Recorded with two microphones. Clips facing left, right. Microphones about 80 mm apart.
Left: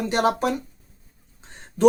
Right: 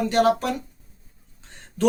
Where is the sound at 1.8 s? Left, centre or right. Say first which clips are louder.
Left 6 dB; centre.